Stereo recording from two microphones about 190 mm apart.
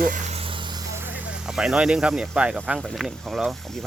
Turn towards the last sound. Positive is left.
turn(degrees=0)  # may be behind; listen again after turning